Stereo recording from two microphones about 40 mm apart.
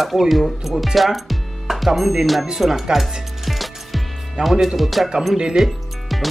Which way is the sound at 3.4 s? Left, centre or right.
Centre.